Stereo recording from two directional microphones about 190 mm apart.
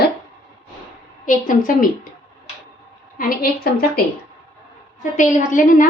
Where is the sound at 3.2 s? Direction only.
50° left (ahead or behind).